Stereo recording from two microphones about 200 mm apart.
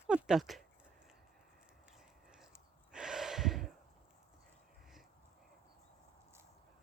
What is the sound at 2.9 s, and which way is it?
Gasp, 5° right (ahead or behind).